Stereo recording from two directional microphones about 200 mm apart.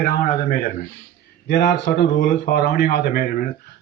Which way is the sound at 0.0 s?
50° left (ahead or behind).